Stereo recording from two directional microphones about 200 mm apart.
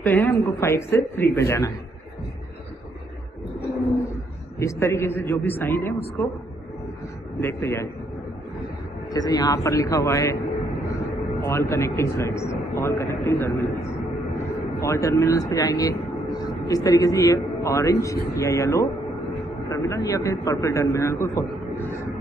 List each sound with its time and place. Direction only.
0.0 s a man's voice: 10° left (ahead or behind)
4.6 s a man's voice: 15° left (ahead or behind)
7.3 s a man's voice: 10° left (ahead or behind)
9.1 s a man's voice: 20° left (ahead or behind)
11.4 s a man's voice: 15° left (ahead or behind)
14.8 s a man's voice: 15° left (ahead or behind)